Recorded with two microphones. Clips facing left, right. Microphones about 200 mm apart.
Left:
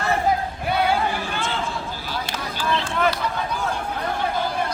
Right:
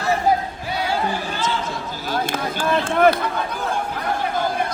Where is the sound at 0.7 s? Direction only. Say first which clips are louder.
Left 4 dB; 55° left (ahead or behind).